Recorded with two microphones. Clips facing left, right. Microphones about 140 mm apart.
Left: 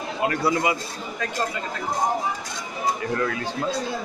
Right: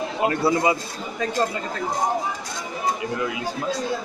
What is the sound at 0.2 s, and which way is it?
Speech, 25° right (ahead or behind).